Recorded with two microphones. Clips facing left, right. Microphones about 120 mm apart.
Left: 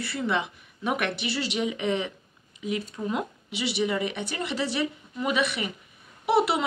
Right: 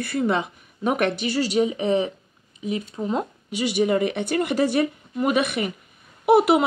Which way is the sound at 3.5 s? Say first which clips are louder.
Right 7 dB; 45° right (ahead or behind).